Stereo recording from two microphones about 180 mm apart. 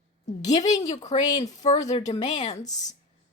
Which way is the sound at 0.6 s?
20° left (ahead or behind).